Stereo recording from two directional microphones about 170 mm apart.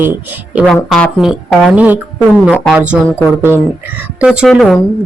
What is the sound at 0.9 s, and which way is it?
Speech, centre (ahead or behind).